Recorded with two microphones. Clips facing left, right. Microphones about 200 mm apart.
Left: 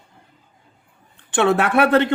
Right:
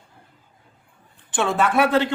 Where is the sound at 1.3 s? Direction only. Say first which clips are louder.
Left 4 dB; 65° left (ahead or behind).